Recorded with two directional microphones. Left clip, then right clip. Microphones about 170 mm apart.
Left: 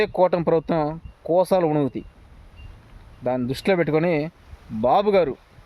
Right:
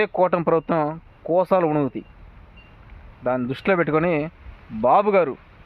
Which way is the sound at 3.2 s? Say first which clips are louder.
Right 1 dB; 20° left (ahead or behind).